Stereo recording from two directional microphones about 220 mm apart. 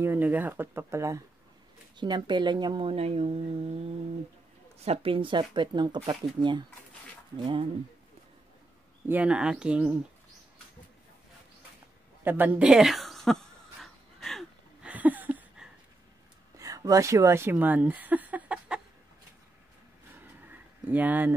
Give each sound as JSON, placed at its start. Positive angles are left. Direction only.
{"t": 0.0, "sound": "speech", "side_deg": -10}
{"t": 9.0, "sound": "speech", "side_deg": -5}
{"t": 12.3, "sound": "a sound", "side_deg": -5}
{"t": 16.5, "sound": "speech", "side_deg": -15}
{"t": 20.8, "sound": "speech", "side_deg": -10}